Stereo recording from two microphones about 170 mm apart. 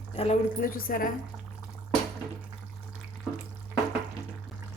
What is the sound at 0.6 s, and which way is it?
Speech, 55° left (ahead or behind).